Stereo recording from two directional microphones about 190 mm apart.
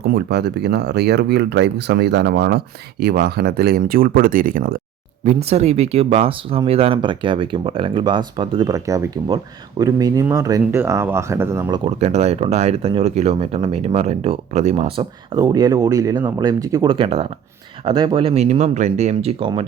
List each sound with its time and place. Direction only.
0.0 s speech: 60° right (ahead or behind)
5.2 s speech: 35° right (ahead or behind); by 11.8 s 15° right (ahead or behind)
11.9 s speech: 35° right (ahead or behind)
15.4 s speech: 20° right (ahead or behind)